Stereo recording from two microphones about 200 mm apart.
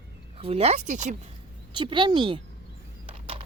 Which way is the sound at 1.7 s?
25° right (ahead or behind).